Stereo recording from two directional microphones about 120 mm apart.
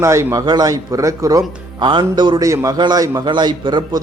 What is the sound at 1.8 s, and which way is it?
A man's voice, 40° right (ahead or behind).